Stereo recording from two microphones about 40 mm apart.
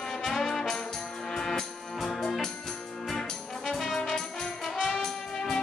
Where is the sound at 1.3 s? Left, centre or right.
Centre.